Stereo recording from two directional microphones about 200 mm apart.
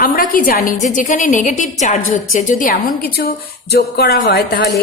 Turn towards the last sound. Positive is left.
turn(degrees=55)  # may be behind; listen again after turning